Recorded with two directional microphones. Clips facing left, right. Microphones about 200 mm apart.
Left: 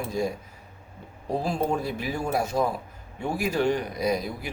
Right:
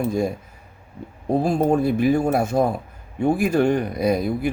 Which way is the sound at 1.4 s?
50° right (ahead or behind).